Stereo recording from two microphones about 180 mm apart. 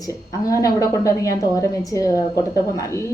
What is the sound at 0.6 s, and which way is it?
Speech, 20° left (ahead or behind).